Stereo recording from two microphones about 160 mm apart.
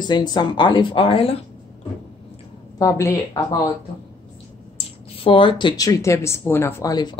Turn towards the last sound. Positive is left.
turn(degrees=25)  # may be behind; listen again after turning